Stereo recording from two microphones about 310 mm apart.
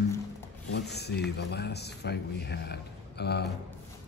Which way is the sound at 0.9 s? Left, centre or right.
Left.